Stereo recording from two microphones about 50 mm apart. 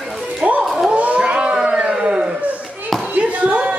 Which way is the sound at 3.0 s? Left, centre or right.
Right.